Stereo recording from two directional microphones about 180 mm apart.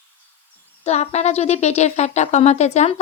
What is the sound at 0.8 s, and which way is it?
Speech, 35° left (ahead or behind).